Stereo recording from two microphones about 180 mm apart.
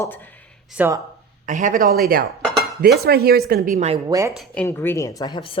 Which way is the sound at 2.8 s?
60° right (ahead or behind).